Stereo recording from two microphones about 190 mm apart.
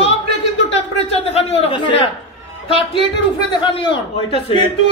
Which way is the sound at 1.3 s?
30° left (ahead or behind).